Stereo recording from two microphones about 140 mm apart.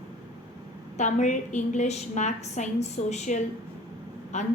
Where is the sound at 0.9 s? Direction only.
60° left (ahead or behind).